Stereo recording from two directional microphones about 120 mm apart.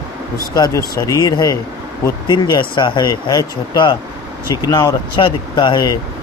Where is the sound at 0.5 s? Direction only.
30° left (ahead or behind).